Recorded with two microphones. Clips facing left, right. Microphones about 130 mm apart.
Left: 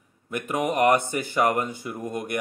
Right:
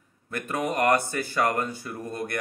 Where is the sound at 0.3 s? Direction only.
15° left (ahead or behind).